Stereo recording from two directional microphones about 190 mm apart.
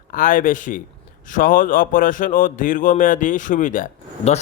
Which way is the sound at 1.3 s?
45° left (ahead or behind).